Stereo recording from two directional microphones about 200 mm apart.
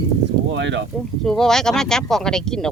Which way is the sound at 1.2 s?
Centre (ahead or behind).